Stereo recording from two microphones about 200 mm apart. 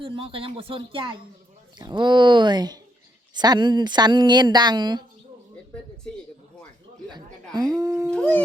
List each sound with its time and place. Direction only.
0.0 s speech: 25° right (ahead or behind)
7.1 s speech: 20° right (ahead or behind)
8.1 s speech: 5° left (ahead or behind)